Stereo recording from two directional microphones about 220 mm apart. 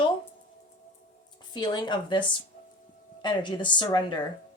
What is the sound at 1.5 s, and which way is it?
Speech, 20° left (ahead or behind).